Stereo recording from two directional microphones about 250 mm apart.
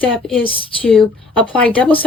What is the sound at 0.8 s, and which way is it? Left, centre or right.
Speech, centre.